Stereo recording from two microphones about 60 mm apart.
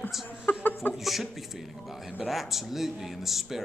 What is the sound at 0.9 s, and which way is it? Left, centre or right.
Speech, centre.